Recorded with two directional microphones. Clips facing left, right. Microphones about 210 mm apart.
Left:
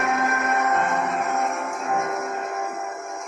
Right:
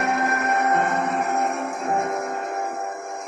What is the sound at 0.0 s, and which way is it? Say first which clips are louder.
Music: right 1 dB; 35° right (ahead or behind).